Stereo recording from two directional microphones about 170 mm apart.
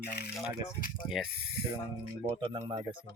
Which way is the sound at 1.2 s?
Centre (ahead or behind).